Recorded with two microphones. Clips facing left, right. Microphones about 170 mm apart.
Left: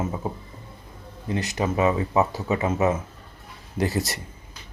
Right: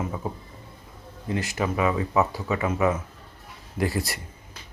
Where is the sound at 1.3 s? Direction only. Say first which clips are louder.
Left 1 dB; 20° left (ahead or behind).